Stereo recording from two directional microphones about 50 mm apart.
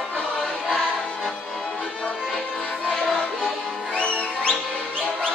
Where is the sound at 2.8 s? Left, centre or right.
Centre.